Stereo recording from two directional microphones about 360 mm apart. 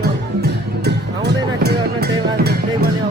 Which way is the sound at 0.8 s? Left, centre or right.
Right.